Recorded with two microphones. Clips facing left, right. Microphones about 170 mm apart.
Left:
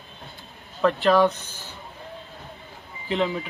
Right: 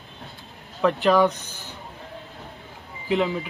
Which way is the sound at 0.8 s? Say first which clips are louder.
Even; 15° right (ahead or behind).